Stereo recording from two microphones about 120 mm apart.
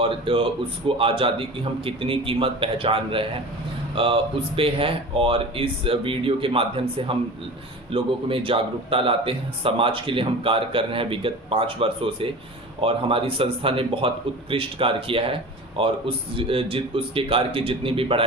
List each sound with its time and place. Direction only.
0.0 s a man's voice: 45° right (ahead or behind)